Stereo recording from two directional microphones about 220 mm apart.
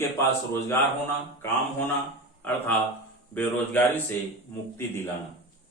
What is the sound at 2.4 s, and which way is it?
A man's voice, 10° left (ahead or behind).